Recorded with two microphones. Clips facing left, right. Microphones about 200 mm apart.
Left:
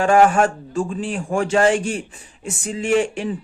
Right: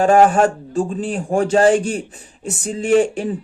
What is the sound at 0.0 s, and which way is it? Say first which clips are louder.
A man's voice: right 2 dB; 35° right (ahead or behind).